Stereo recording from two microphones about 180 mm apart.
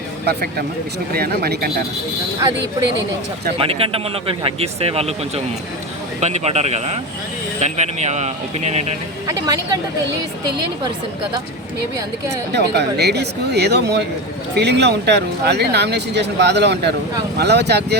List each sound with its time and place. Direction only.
1.1 s speech: 60° right (ahead or behind)
3.6 s speech: 30° right (ahead or behind)
9.2 s a woman's voice: 20° right (ahead or behind)
12.5 s speech: 65° right (ahead or behind)